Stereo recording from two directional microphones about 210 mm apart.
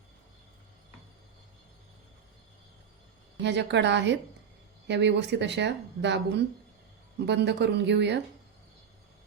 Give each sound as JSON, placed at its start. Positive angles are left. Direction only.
{"t": 3.4, "sound": "speech", "side_deg": -55}